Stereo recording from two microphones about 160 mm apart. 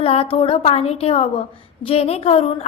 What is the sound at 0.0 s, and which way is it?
A woman's voice, 40° left (ahead or behind).